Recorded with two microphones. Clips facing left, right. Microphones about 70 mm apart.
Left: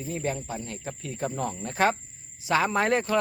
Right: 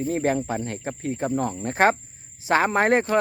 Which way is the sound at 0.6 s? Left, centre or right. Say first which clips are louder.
Right 7 dB; right.